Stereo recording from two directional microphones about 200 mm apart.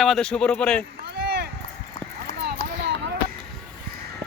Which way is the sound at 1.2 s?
55° right (ahead or behind).